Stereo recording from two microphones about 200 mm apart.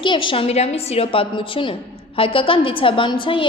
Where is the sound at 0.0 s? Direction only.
25° left (ahead or behind).